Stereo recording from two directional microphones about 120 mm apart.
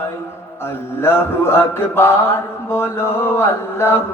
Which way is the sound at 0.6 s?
20° left (ahead or behind).